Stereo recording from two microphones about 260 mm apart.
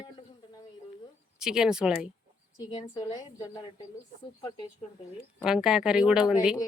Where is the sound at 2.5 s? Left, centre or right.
Centre.